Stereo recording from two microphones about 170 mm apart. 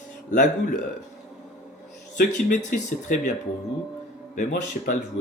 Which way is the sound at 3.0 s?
50° left (ahead or behind).